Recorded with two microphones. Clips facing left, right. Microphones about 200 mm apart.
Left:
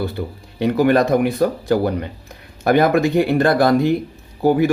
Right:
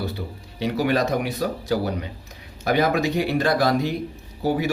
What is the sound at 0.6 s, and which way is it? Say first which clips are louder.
Speech: left 7 dB; 55° left (ahead or behind).